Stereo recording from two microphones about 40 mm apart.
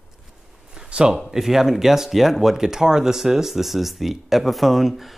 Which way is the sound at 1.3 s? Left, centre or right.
Centre.